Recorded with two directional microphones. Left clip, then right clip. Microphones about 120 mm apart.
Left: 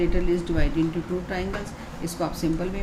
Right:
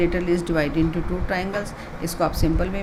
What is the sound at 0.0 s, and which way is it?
Speech, 60° right (ahead or behind).